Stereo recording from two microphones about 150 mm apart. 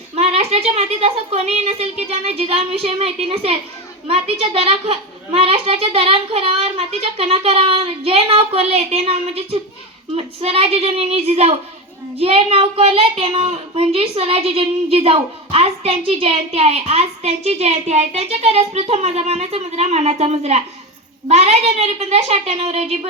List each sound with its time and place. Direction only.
0.2 s a woman's voice: 45° right (ahead or behind)